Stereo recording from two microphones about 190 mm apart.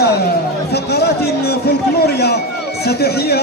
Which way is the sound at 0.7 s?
60° left (ahead or behind).